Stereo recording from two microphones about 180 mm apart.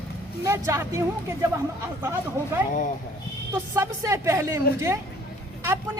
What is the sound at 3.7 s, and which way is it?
A man's voice, 15° right (ahead or behind).